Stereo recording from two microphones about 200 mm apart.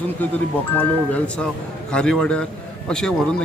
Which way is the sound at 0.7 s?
5° left (ahead or behind).